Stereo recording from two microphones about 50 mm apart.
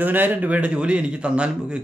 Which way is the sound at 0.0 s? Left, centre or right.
Right.